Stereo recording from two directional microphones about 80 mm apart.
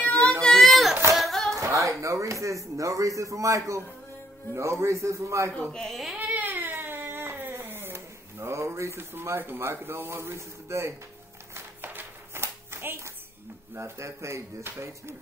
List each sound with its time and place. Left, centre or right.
0.4 s a sound: centre
1.5 s speech: right
5.5 s speech: centre
6.1 s a sound: centre; by 11.0 s right
11.5 s music: right
13.7 s speech: right